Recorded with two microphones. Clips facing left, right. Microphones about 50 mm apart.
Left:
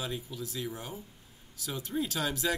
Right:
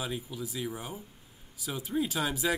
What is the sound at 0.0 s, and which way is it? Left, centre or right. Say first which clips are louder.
Speech: right 1 dB; centre.